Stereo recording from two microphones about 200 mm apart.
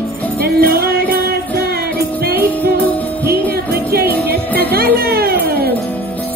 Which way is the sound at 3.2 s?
50° right (ahead or behind).